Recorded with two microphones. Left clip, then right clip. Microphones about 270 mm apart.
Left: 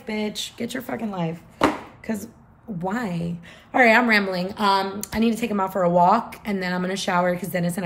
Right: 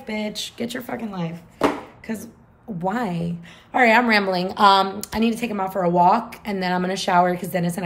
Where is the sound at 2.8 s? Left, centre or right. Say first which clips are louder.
Right 3 dB; centre.